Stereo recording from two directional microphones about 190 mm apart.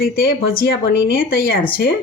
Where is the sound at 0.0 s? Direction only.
50° left (ahead or behind).